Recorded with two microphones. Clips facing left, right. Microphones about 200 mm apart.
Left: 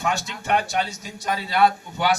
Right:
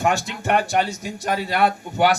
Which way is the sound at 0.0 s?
55° right (ahead or behind).